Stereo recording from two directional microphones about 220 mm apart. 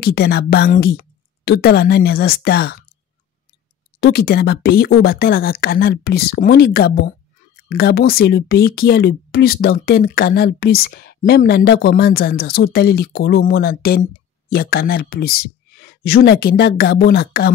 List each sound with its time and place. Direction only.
0.0 s speech: 45° left (ahead or behind)
4.0 s speech: 45° left (ahead or behind)